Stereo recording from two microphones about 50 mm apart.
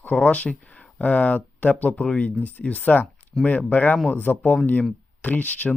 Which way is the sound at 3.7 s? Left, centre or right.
Left.